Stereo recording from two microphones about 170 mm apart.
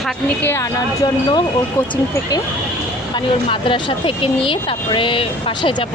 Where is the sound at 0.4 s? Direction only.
15° left (ahead or behind).